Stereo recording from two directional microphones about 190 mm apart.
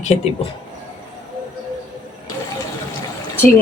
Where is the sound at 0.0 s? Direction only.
35° left (ahead or behind).